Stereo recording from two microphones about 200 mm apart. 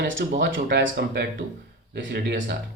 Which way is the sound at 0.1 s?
70° right (ahead or behind).